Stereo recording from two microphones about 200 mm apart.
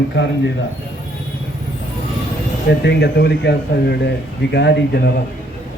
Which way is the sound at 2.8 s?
55° left (ahead or behind).